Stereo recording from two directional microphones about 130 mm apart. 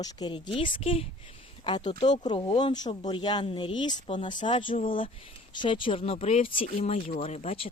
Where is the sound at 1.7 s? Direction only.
35° left (ahead or behind).